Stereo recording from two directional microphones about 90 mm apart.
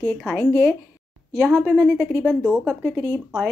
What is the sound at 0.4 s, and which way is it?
Speech, 20° left (ahead or behind).